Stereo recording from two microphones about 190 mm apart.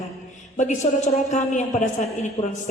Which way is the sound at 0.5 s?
40° left (ahead or behind).